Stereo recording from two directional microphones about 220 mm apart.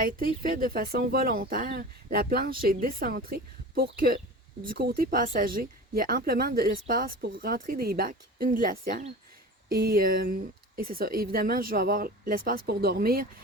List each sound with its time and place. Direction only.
0.0 s speech: 40° right (ahead or behind)